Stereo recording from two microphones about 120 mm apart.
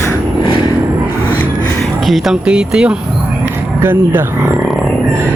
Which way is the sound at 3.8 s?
20° right (ahead or behind).